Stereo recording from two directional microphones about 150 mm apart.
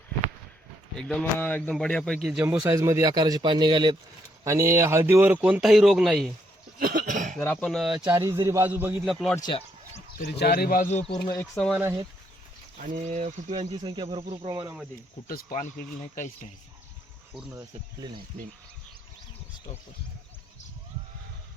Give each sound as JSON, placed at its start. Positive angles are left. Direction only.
{"t": 0.9, "sound": "speech", "side_deg": 5}
{"t": 2.4, "sound": "a man's voice", "side_deg": -10}
{"t": 4.4, "sound": "a man's voice", "side_deg": -20}
{"t": 6.7, "sound": "cough", "side_deg": -70}
{"t": 7.3, "sound": "speech", "side_deg": 10}
{"t": 8.0, "sound": "a man's voice", "side_deg": -20}
{"t": 9.3, "sound": "speech", "side_deg": 25}
{"t": 10.2, "sound": "speech", "side_deg": 90}
{"t": 11.5, "sound": "speech", "side_deg": 0}
{"t": 12.8, "sound": "speech", "side_deg": -50}
{"t": 13.5, "sound": "speech", "side_deg": -30}
{"t": 15.3, "sound": "speech", "side_deg": 70}